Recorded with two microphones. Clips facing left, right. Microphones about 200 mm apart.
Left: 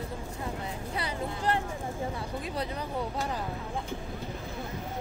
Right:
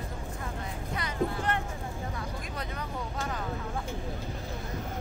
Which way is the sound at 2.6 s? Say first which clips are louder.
Left 4 dB; 30° left (ahead or behind).